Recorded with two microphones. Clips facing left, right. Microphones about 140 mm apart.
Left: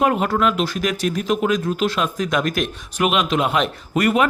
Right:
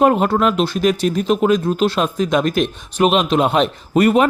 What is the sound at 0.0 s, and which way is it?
Speech, 30° right (ahead or behind).